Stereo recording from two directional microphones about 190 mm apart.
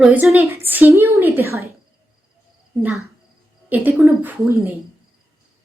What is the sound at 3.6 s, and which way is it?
A woman's voice, 10° right (ahead or behind).